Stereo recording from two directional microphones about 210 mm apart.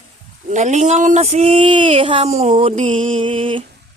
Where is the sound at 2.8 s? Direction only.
25° right (ahead or behind).